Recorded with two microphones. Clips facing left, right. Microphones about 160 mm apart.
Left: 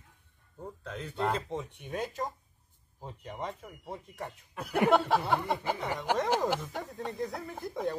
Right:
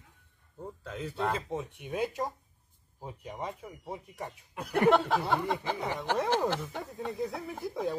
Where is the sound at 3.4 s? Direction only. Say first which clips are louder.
Even; 10° right (ahead or behind).